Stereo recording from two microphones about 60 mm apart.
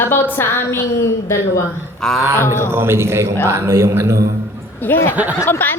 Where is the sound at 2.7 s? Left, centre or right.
Right.